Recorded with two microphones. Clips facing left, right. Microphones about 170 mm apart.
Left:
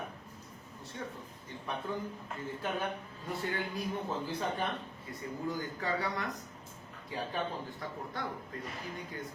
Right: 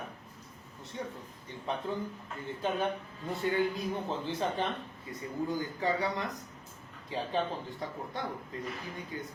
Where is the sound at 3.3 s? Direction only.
20° right (ahead or behind).